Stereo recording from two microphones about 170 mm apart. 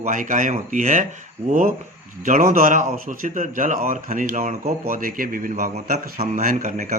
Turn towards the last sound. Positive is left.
turn(degrees=-55)  # may be behind; listen again after turning